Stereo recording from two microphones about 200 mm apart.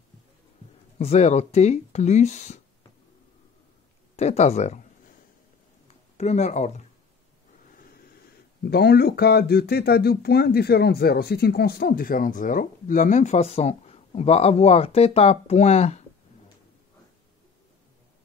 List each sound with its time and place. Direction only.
0.9 s speech: 35° left (ahead or behind)
4.2 s speech: 35° left (ahead or behind)
6.1 s speech: 35° left (ahead or behind)
8.6 s speech: 50° left (ahead or behind); by 16.0 s 35° left (ahead or behind)